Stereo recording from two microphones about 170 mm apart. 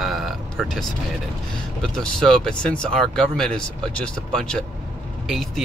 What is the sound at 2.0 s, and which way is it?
Speech, 5° left (ahead or behind).